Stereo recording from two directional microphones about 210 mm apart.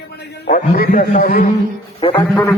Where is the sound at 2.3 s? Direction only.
5° left (ahead or behind).